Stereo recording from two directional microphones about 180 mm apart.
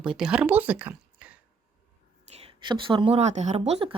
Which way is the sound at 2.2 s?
35° right (ahead or behind).